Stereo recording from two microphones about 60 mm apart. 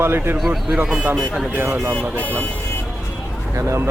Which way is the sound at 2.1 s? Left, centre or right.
Left.